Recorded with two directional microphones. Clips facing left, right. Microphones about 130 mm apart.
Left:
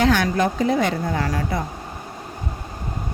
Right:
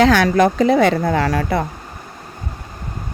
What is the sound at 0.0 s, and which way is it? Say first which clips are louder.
A woman's voice: right 6 dB; 90° right.